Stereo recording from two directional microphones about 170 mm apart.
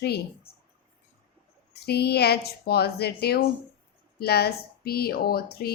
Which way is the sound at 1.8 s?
70° left (ahead or behind).